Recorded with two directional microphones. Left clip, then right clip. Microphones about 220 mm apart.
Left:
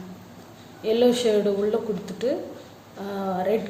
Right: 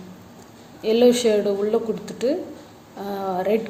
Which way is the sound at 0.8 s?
20° right (ahead or behind).